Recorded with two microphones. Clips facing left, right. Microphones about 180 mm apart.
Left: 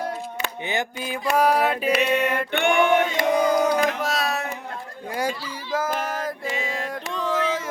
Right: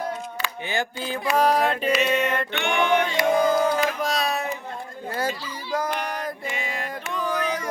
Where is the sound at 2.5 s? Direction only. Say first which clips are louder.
Left 5 dB; 55° left (ahead or behind).